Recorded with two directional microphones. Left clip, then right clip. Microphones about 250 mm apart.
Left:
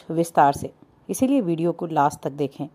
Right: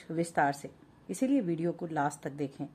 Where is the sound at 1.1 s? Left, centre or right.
Left.